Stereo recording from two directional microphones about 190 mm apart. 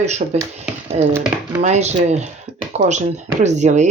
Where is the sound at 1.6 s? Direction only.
35° right (ahead or behind).